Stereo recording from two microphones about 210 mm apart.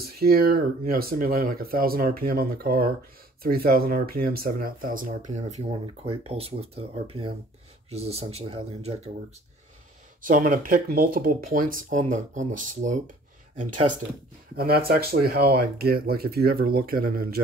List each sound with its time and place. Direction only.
0.0 s speech: 45° right (ahead or behind); by 9.1 s 30° right (ahead or behind)
10.2 s speech: 40° right (ahead or behind)
14.6 s speech: 45° right (ahead or behind)